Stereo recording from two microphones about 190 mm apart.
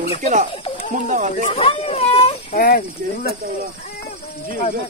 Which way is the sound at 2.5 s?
50° left (ahead or behind).